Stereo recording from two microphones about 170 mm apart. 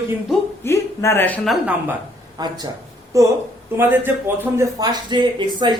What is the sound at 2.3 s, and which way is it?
Speech, 25° right (ahead or behind).